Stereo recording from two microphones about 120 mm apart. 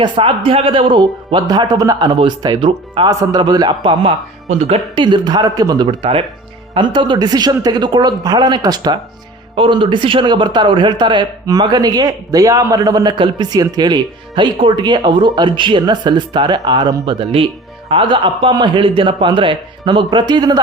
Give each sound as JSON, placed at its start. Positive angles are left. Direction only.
{"t": 0.0, "sound": "a man's voice", "side_deg": -45}
{"t": 3.1, "sound": "a man's voice", "side_deg": -35}
{"t": 4.5, "sound": "speech", "side_deg": -60}
{"t": 5.0, "sound": "a man's voice", "side_deg": -40}